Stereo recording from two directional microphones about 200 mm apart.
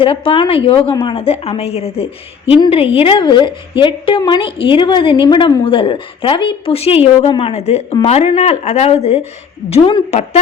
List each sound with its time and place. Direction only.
0.0 s a woman's voice: 25° left (ahead or behind)